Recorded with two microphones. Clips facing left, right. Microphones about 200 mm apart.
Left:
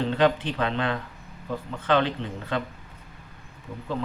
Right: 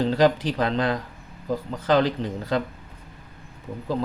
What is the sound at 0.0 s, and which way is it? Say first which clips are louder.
A man's voice: right 3 dB; 35° right (ahead or behind).